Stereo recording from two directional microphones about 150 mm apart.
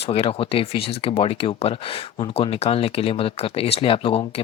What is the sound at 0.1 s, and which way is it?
Speech, 40° left (ahead or behind).